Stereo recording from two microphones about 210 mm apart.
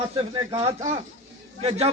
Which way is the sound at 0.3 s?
25° right (ahead or behind).